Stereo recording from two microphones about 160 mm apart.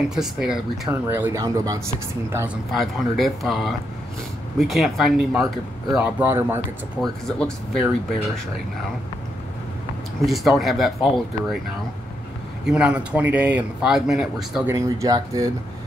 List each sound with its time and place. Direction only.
0.1 s speech: 5° right (ahead or behind)
0.8 s speech: 15° right (ahead or behind)
2.3 s speech: 10° right (ahead or behind)
7.0 s speech: 5° left (ahead or behind)
10.2 s speech: centre (ahead or behind)
12.6 s speech: 5° right (ahead or behind)
14.7 s speech: 20° right (ahead or behind)